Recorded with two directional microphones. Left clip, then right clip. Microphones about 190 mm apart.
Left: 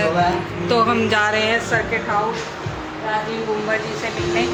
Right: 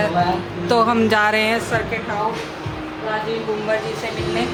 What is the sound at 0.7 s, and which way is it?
Speech, 25° right (ahead or behind).